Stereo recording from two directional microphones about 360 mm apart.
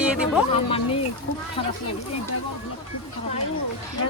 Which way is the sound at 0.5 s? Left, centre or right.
Centre.